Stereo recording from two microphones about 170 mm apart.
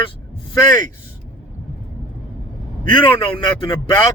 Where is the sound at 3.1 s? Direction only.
30° left (ahead or behind).